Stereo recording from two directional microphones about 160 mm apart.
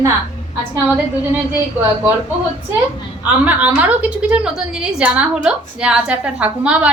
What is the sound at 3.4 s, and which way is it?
A woman's voice, 10° right (ahead or behind).